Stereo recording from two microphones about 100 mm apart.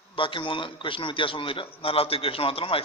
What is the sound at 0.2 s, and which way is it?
A man's voice, 60° left (ahead or behind).